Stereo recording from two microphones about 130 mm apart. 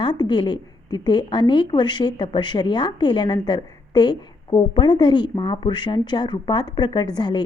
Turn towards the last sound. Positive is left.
turn(degrees=35)  # may be behind; listen again after turning